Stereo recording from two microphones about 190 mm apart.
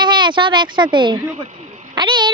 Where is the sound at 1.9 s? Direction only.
25° right (ahead or behind).